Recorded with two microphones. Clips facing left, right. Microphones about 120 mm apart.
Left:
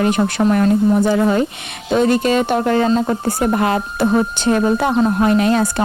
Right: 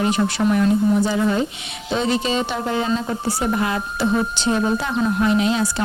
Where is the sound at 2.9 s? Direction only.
40° left (ahead or behind).